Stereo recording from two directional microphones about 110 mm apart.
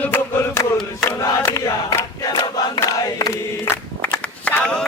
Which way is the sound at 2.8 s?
30° left (ahead or behind).